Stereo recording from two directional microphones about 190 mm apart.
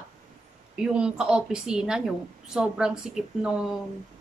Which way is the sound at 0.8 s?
5° right (ahead or behind).